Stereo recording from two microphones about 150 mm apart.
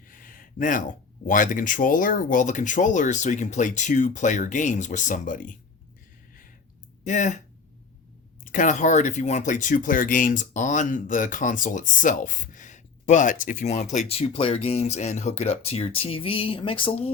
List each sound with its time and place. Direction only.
0.1 s speech: 65° left (ahead or behind)
7.0 s speech: 55° left (ahead or behind)
8.4 s speech: 60° left (ahead or behind)
14.1 s speech: 40° left (ahead or behind)